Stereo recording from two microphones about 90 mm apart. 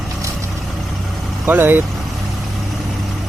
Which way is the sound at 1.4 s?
20° right (ahead or behind).